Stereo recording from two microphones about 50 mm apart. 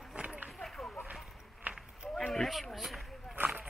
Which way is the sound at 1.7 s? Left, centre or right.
Right.